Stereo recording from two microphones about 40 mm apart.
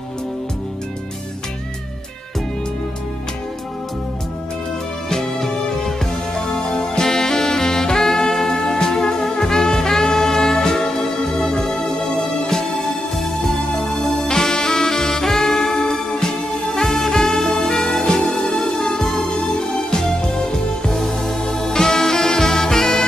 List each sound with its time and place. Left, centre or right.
5.1 s music: centre
13.2 s saxophone: centre
17.5 s music: left
17.7 s music: centre